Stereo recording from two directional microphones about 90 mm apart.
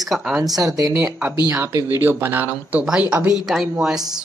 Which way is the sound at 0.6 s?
40° right (ahead or behind).